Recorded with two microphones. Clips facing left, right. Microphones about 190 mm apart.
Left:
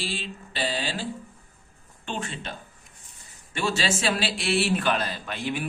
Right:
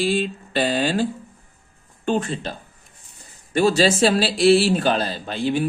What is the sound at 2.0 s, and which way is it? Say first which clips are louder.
A man's voice: right 10 dB; 40° right (ahead or behind).